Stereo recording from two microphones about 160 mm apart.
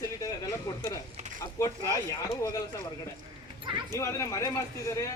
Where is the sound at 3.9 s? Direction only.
20° left (ahead or behind).